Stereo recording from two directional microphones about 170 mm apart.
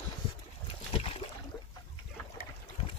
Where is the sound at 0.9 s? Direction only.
35° left (ahead or behind).